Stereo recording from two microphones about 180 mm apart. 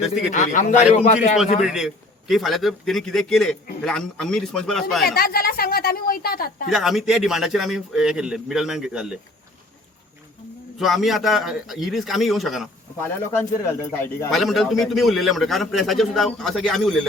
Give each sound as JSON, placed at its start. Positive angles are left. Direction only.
{"t": 0.3, "sound": "a man's voice", "side_deg": 45}
{"t": 1.6, "sound": "a man's voice", "side_deg": -5}
{"t": 5.0, "sound": "a woman's voice", "side_deg": 55}
{"t": 6.7, "sound": "a man's voice", "side_deg": 0}
{"t": 10.8, "sound": "a man's voice", "side_deg": 0}
{"t": 13.6, "sound": "speech", "side_deg": 15}
{"t": 14.3, "sound": "a man's voice", "side_deg": 0}